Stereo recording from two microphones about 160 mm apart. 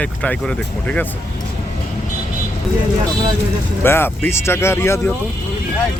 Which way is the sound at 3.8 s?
15° left (ahead or behind).